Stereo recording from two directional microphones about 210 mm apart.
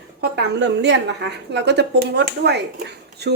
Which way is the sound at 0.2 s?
55° right (ahead or behind).